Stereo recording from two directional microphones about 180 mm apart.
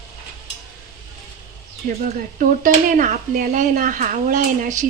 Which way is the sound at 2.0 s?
50° right (ahead or behind).